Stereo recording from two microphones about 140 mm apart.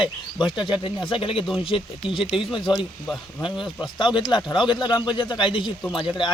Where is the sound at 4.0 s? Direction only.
35° left (ahead or behind).